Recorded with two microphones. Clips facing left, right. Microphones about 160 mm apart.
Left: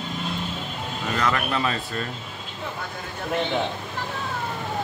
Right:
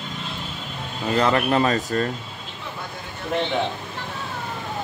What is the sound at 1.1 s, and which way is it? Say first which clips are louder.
Speech: right 6 dB; 35° right (ahead or behind).